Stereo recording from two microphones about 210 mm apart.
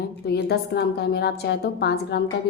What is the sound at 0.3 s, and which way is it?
A woman's voice, 50° left (ahead or behind).